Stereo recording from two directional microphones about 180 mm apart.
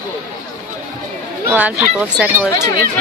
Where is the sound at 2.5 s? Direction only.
20° left (ahead or behind).